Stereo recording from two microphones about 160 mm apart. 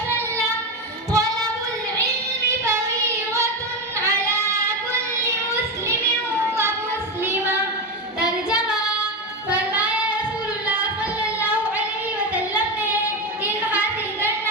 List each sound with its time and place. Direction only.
1.1 s child singing: 20° right (ahead or behind)
4.0 s child singing: 15° right (ahead or behind)
7.3 s child singing: 15° right (ahead or behind)
10.8 s music: 10° right (ahead or behind)
12.3 s child singing: 10° right (ahead or behind)
13.4 s a sound: 10° right (ahead or behind)